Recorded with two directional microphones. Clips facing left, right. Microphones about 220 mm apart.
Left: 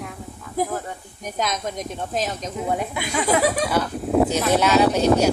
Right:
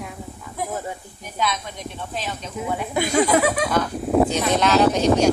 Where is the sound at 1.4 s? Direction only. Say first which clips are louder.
Left 1 dB; 45° left (ahead or behind).